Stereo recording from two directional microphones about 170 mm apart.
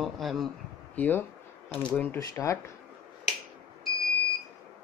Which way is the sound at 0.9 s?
10° left (ahead or behind).